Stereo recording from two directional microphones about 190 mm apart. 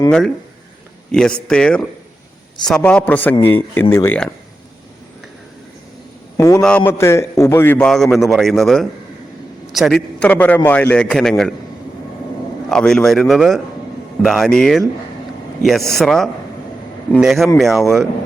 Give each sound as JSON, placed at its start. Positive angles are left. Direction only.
{"t": 1.1, "sound": "a man's voice", "side_deg": 5}
{"t": 6.3, "sound": "a man's voice", "side_deg": 15}
{"t": 12.6, "sound": "a man's voice", "side_deg": 5}
{"t": 16.0, "sound": "a man's voice", "side_deg": 0}